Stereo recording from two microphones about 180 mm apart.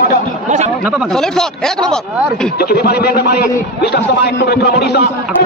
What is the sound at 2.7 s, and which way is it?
A man's voice, 60° left (ahead or behind).